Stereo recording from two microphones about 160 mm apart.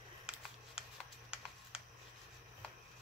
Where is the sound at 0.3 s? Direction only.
5° right (ahead or behind).